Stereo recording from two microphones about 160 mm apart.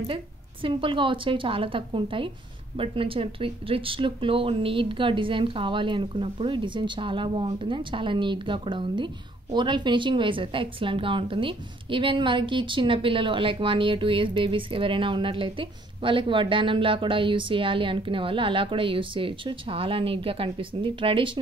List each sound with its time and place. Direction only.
0.0 s speech: 35° right (ahead or behind)